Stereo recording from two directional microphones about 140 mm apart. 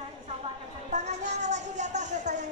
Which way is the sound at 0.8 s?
55° right (ahead or behind).